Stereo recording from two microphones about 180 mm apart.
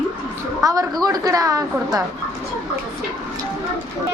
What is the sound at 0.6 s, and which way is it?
A woman's voice, 20° right (ahead or behind).